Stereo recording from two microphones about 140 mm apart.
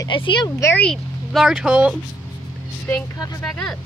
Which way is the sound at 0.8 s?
Centre (ahead or behind).